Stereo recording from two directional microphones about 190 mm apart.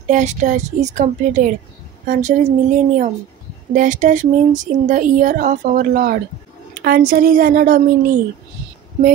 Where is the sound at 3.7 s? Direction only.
40° right (ahead or behind).